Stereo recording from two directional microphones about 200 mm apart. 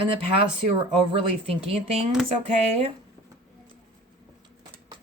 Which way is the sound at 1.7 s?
30° right (ahead or behind).